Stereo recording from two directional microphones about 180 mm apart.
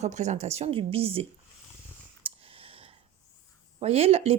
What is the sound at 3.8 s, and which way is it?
Speech, 35° right (ahead or behind).